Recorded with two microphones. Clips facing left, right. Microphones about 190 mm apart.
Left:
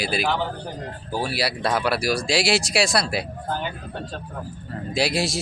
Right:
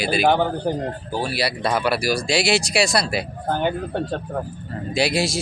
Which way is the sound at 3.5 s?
60° right (ahead or behind).